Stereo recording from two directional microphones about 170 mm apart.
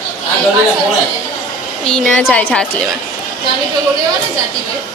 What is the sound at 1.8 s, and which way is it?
Speech, 5° left (ahead or behind).